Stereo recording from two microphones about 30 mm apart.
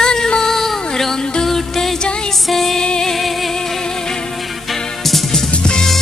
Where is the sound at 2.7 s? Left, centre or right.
Left.